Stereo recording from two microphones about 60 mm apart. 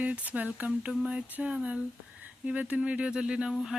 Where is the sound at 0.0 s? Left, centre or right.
Right.